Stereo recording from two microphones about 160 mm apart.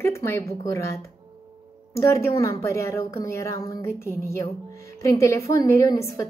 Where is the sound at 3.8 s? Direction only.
15° left (ahead or behind).